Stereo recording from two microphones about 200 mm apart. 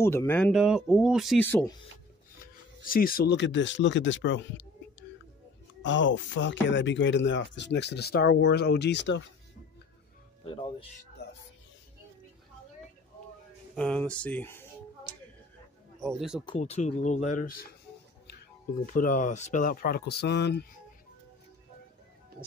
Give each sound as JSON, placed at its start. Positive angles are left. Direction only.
{"t": 0.0, "sound": "speech", "side_deg": 15}
{"t": 0.5, "sound": "speech", "side_deg": -5}
{"t": 1.4, "sound": "speech", "side_deg": 10}
{"t": 2.8, "sound": "speech", "side_deg": 45}
{"t": 5.8, "sound": "speech", "side_deg": 65}
{"t": 10.4, "sound": "speech", "side_deg": 25}
{"t": 13.7, "sound": "speech", "side_deg": 5}
{"t": 16.0, "sound": "speech", "side_deg": 0}
{"t": 16.5, "sound": "speech", "side_deg": 35}
{"t": 18.9, "sound": "speech", "side_deg": 40}